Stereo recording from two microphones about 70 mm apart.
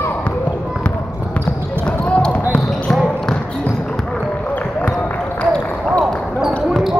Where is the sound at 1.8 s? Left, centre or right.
Centre.